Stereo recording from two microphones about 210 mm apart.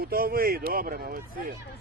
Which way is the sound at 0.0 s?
45° right (ahead or behind).